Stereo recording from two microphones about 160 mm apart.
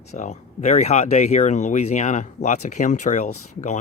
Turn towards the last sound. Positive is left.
turn(degrees=45)  # may be behind; listen again after turning